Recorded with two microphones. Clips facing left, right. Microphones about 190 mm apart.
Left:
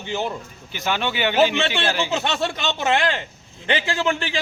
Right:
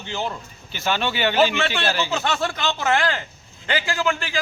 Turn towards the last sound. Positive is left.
turn(degrees=25)  # may be behind; listen again after turning